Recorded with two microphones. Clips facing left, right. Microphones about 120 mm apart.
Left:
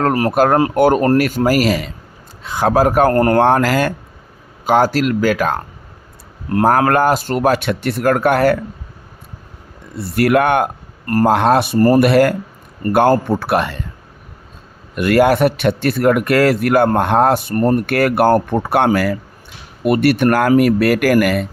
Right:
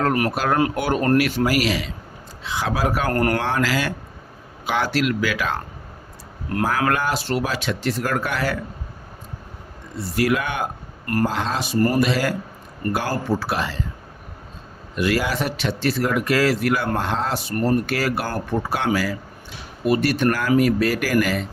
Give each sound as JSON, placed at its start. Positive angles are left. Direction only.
{"t": 0.0, "sound": "speech", "side_deg": 35}
{"t": 0.3, "sound": "speech", "side_deg": 50}
{"t": 3.1, "sound": "speech", "side_deg": 30}
{"t": 3.4, "sound": "speech", "side_deg": 50}
{"t": 6.7, "sound": "speech", "side_deg": 50}
{"t": 10.0, "sound": "speech", "side_deg": 60}
{"t": 11.0, "sound": "speech", "side_deg": 40}
{"t": 11.3, "sound": "speech", "side_deg": 60}
{"t": 14.9, "sound": "speech", "side_deg": 55}